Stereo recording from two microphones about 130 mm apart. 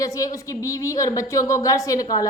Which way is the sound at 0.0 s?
25° left (ahead or behind).